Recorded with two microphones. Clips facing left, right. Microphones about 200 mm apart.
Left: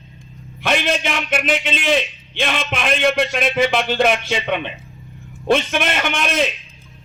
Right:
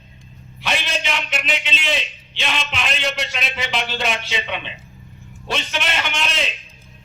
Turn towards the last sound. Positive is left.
turn(degrees=55)  # may be behind; listen again after turning